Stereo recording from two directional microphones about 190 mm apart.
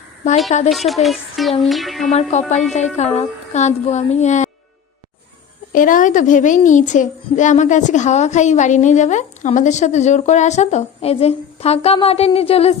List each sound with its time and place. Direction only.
0.7 s music: centre (ahead or behind)
2.0 s a child's voice: 35° left (ahead or behind)
5.7 s a child's voice: 45° left (ahead or behind)